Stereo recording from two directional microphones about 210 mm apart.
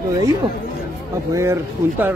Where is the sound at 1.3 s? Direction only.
15° right (ahead or behind).